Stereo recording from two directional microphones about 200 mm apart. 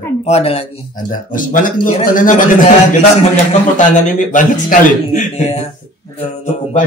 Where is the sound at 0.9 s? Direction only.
45° left (ahead or behind).